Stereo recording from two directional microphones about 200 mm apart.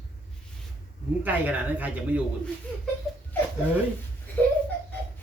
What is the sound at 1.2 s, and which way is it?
A man's voice, 10° right (ahead or behind).